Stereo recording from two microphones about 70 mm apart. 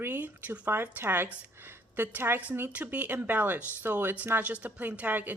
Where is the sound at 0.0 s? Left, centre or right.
Right.